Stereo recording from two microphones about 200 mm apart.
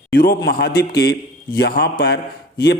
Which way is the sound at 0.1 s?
50° left (ahead or behind).